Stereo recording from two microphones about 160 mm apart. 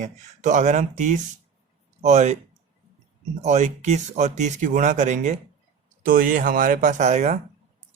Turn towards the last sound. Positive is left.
turn(degrees=-45)  # may be behind; listen again after turning